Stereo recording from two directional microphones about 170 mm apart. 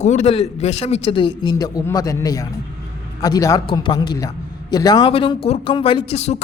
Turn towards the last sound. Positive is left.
turn(degrees=40)  # may be behind; listen again after turning